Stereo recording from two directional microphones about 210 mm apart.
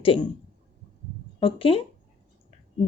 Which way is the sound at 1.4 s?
25° left (ahead or behind).